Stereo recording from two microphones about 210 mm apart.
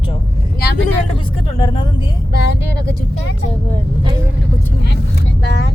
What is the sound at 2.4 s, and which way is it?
Speech, 50° left (ahead or behind).